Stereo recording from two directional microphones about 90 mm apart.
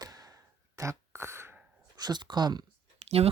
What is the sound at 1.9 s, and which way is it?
Speech, 50° right (ahead or behind).